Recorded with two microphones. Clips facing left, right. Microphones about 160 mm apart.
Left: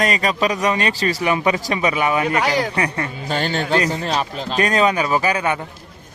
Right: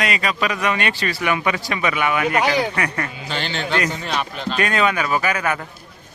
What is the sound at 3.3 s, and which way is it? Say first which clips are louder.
A man's voice: left 6 dB; 40° left (ahead or behind).